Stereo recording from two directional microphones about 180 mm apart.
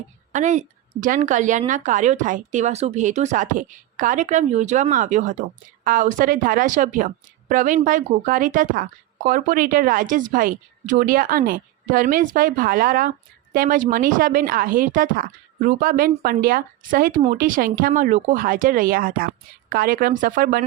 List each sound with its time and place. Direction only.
0.3 s a woman's voice: 40° right (ahead or behind)